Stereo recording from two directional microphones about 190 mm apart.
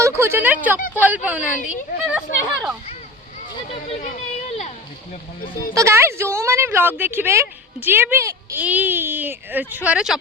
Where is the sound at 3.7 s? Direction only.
35° left (ahead or behind).